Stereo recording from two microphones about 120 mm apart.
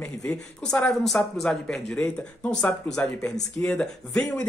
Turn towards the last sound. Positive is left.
turn(degrees=10)  # may be behind; listen again after turning